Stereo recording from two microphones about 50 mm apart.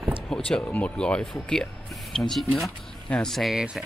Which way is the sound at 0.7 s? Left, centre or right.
Left.